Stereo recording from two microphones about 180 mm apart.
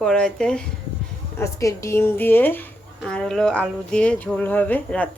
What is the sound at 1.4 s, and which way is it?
A woman's voice, 15° left (ahead or behind).